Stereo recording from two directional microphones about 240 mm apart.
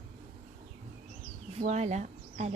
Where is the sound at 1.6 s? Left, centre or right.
Right.